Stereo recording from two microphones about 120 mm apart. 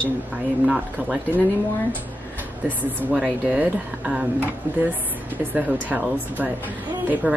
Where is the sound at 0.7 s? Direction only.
10° right (ahead or behind).